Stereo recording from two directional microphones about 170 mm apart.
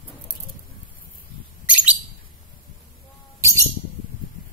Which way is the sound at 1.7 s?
10° right (ahead or behind).